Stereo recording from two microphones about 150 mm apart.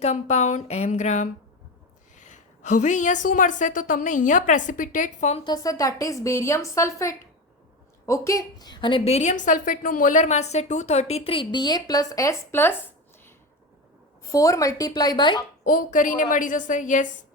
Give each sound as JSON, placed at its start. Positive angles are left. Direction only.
{"t": 0.0, "sound": "a woman's voice", "side_deg": 50}
{"t": 5.5, "sound": "a woman's voice", "side_deg": 25}
{"t": 14.3, "sound": "a woman's voice", "side_deg": 20}
{"t": 15.6, "sound": "a woman's voice", "side_deg": 65}